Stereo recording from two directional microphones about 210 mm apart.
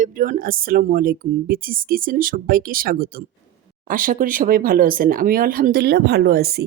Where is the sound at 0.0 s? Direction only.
40° right (ahead or behind).